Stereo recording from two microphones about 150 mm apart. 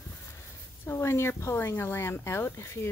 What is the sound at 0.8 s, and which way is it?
Speech, 15° left (ahead or behind).